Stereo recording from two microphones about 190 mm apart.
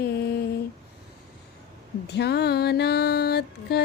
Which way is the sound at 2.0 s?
60° left (ahead or behind).